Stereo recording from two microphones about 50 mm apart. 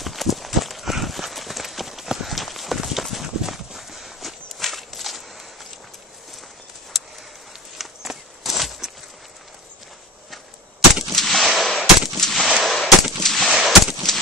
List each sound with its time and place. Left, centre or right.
0.0 s run: centre
7.7 s a sound: centre
11.1 s machine gun: centre
12.5 s gunshot: centre